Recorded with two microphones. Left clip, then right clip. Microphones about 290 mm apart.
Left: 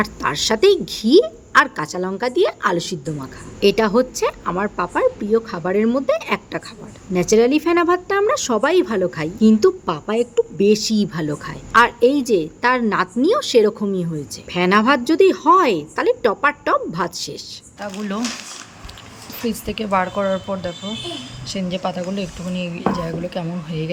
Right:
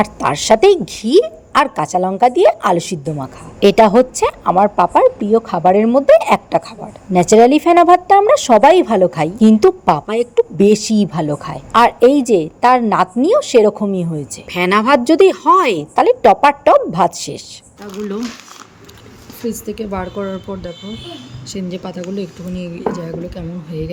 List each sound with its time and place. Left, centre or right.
0.0 s a woman's voice: centre
19.5 s speech: centre